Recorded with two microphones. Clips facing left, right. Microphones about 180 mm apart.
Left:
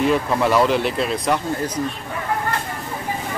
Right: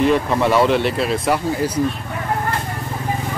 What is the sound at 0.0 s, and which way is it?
Speech, centre (ahead or behind).